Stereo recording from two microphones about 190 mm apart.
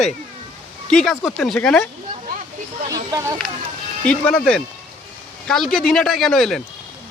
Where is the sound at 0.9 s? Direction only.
5° left (ahead or behind).